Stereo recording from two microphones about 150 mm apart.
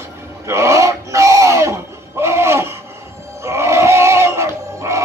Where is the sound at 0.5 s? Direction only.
20° right (ahead or behind).